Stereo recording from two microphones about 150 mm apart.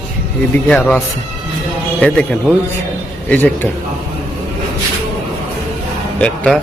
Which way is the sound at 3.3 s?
10° left (ahead or behind).